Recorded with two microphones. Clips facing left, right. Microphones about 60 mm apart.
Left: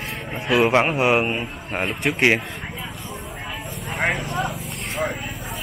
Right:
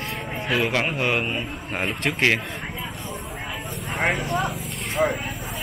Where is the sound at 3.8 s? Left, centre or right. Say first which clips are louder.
Even; centre.